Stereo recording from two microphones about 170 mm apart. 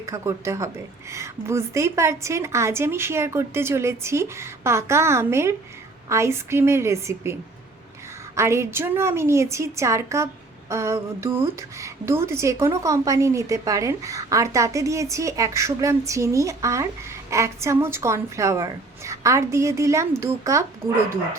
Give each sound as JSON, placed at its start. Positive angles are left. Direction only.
{"t": 0.0, "sound": "a woman's voice", "side_deg": -15}
{"t": 8.4, "sound": "a woman's voice", "side_deg": -15}